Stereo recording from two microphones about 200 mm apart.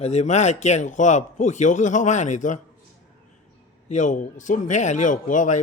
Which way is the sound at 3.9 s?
40° left (ahead or behind).